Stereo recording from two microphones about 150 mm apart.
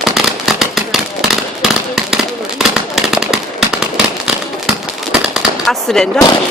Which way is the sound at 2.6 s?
5° right (ahead or behind).